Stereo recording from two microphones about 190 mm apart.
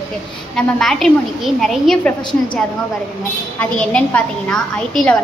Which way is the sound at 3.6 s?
5° left (ahead or behind).